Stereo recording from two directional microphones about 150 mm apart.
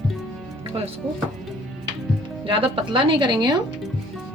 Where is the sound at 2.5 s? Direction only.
35° right (ahead or behind).